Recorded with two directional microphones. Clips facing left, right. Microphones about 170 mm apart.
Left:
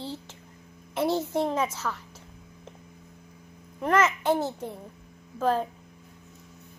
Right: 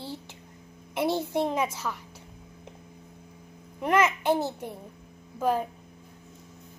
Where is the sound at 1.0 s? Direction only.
15° right (ahead or behind).